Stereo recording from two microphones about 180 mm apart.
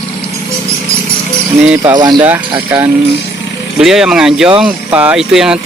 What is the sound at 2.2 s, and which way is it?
Speech, 10° right (ahead or behind).